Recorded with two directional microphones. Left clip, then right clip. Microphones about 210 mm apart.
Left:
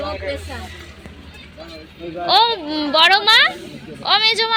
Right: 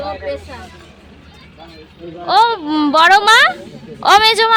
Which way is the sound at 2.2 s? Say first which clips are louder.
Right 3 dB; 30° right (ahead or behind).